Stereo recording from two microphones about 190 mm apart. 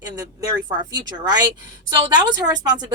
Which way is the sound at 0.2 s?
20° right (ahead or behind).